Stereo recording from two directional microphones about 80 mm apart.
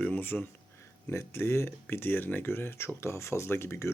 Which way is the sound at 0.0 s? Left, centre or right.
Left.